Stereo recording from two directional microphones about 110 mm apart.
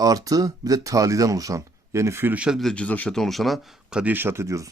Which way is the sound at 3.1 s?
Centre (ahead or behind).